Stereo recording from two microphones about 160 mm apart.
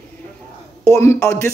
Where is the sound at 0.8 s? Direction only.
20° left (ahead or behind).